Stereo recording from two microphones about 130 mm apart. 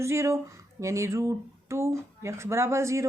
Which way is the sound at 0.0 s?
20° right (ahead or behind).